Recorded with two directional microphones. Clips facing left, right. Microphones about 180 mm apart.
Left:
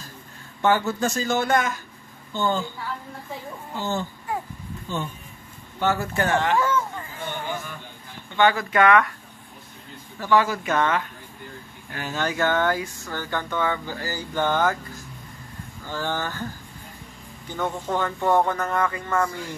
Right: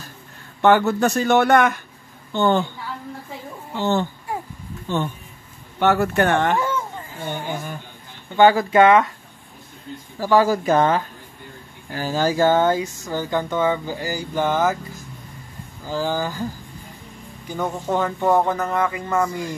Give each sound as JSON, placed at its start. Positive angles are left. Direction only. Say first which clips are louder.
{"t": 0.6, "sound": "speech", "louder": "right 6 dB", "side_deg": -65}
{"t": 3.7, "sound": "speech", "louder": "right 7 dB", "side_deg": -70}
{"t": 8.4, "sound": "speech", "louder": "right 6 dB", "side_deg": -30}
{"t": 10.2, "sound": "speech", "louder": "right 4 dB", "side_deg": -35}
{"t": 15.8, "sound": "speech", "louder": "right 5 dB", "side_deg": -10}